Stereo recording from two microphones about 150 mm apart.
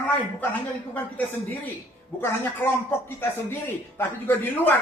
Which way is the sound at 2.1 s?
15° left (ahead or behind).